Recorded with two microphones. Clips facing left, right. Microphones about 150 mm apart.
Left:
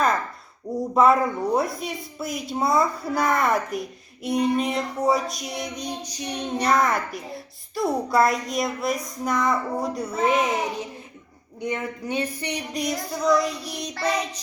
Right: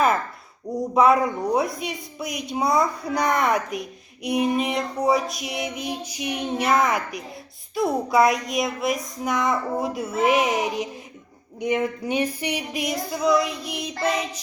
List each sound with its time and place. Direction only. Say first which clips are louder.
0.9 s speech: even; centre (ahead or behind)
10.4 s a sound: right 2 dB; 15° right (ahead or behind)
13.7 s speech: right 2 dB; 5° right (ahead or behind)